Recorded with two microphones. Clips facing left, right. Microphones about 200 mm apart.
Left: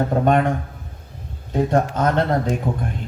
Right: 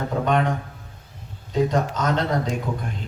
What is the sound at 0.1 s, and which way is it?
Speech, 50° left (ahead or behind).